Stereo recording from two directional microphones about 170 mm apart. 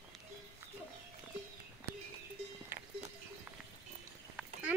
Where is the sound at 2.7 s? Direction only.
10° right (ahead or behind).